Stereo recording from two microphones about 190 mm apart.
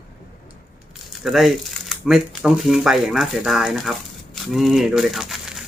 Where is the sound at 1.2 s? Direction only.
Centre (ahead or behind).